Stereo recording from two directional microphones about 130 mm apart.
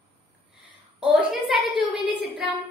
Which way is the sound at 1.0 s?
Centre (ahead or behind).